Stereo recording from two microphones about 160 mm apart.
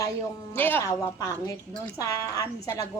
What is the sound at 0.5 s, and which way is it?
A woman's voice, 10° left (ahead or behind).